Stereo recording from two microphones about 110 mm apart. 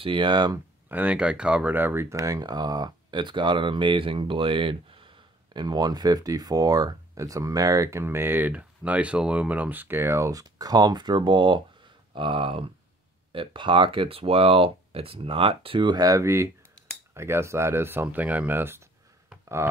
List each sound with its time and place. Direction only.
0.0 s speech: 45° right (ahead or behind)
0.8 s speech: 15° right (ahead or behind)